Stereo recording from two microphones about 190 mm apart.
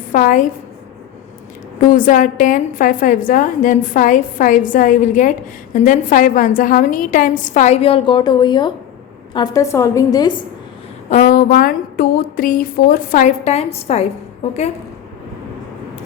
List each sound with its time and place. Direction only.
0.1 s a woman's voice: 45° left (ahead or behind)
1.9 s a woman's voice: 45° left (ahead or behind); by 10.3 s 20° left (ahead or behind)
11.1 s a woman's voice: 45° left (ahead or behind)